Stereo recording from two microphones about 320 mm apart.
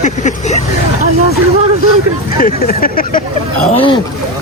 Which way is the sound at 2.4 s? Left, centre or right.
Left.